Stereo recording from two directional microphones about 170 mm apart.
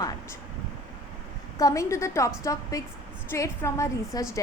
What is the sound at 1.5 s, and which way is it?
A woman's voice, 20° left (ahead or behind).